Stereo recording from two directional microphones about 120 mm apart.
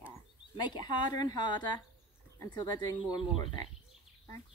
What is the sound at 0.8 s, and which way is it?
Speech, 35° left (ahead or behind).